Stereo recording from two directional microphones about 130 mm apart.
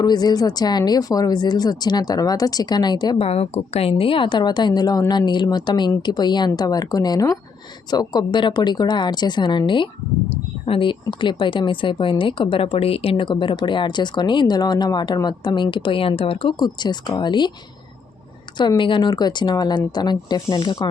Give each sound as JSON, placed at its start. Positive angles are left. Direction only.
{"t": 0.0, "sound": "a woman's voice", "side_deg": 30}
{"t": 3.2, "sound": "a woman's voice", "side_deg": 50}
{"t": 16.6, "sound": "a woman's voice", "side_deg": 35}
{"t": 18.8, "sound": "a woman's voice", "side_deg": 35}